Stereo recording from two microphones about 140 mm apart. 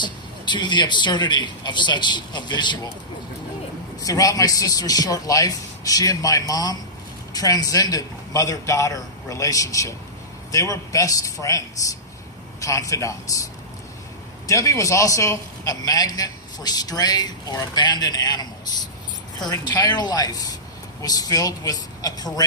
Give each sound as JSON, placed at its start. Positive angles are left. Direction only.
{"t": 0.0, "sound": "a man's voice", "side_deg": 30}
{"t": 4.0, "sound": "a man's voice", "side_deg": 25}